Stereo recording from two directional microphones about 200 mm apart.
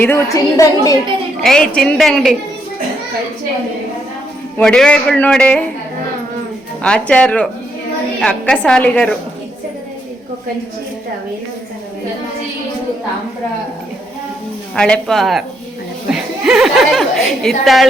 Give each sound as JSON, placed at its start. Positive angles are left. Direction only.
{"t": 0.0, "sound": "a woman's voice", "side_deg": 15}
{"t": 1.4, "sound": "a woman's voice", "side_deg": 5}
{"t": 4.5, "sound": "a woman's voice", "side_deg": 5}
{"t": 6.8, "sound": "a woman's voice", "side_deg": 5}
{"t": 14.8, "sound": "a woman's voice", "side_deg": 5}